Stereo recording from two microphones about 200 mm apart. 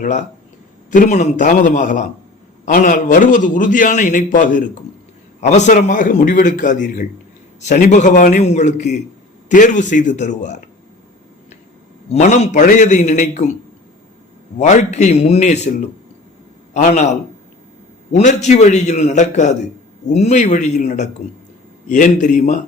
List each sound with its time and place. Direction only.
0.0 s a man's voice: 35° left (ahead or behind)
12.1 s a man's voice: 35° left (ahead or behind)
14.6 s a man's voice: 35° left (ahead or behind)
16.7 s a man's voice: 35° left (ahead or behind)